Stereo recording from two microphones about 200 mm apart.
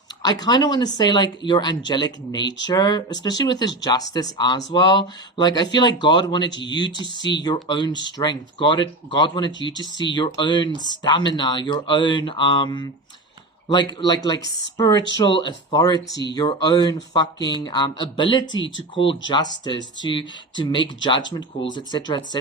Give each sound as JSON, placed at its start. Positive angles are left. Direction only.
{"t": 0.2, "sound": "speech", "side_deg": 20}